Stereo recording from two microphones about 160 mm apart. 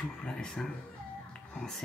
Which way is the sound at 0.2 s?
5° left (ahead or behind).